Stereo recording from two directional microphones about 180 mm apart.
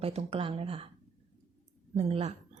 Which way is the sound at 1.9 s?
35° right (ahead or behind).